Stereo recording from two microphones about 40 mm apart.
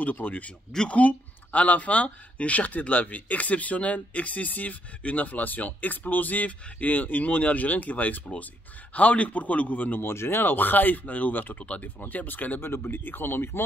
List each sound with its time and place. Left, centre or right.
0.0 s speech: left
10.0 s speech: left
10.4 s speech: left
11.6 s speech: left
12.0 s speech: left
12.6 s speech: left